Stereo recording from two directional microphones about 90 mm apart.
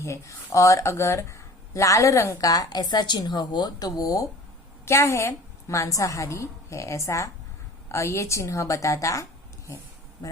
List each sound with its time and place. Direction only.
0.0 s speech: 30° left (ahead or behind)
2.5 s speech: 45° left (ahead or behind)
4.9 s speech: 30° left (ahead or behind)